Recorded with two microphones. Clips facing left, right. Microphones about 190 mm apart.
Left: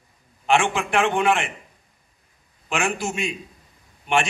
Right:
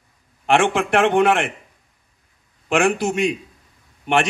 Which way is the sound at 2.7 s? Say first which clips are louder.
Right 7 dB; 55° right (ahead or behind).